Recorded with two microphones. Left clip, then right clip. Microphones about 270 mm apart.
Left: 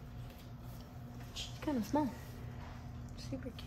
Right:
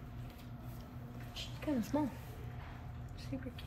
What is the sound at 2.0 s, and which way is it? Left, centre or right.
Speech, left.